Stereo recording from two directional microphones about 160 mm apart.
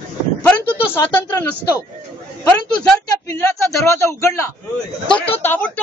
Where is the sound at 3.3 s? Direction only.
20° left (ahead or behind).